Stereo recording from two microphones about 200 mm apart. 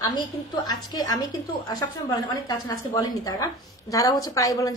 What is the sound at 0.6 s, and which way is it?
A woman's voice, 20° left (ahead or behind).